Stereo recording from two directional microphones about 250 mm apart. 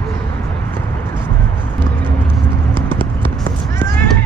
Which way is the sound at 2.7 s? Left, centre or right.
Centre.